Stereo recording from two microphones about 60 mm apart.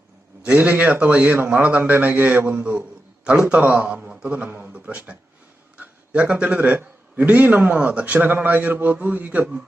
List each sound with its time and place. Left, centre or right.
0.4 s a man's voice: right